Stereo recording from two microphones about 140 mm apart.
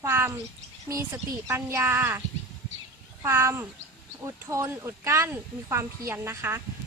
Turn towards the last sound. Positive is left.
turn(degrees=-15)  # may be behind; listen again after turning